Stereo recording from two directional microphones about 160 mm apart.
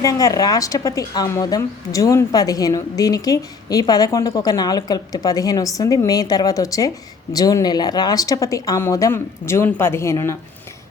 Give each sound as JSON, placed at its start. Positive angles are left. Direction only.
{"t": 0.0, "sound": "speech", "side_deg": 20}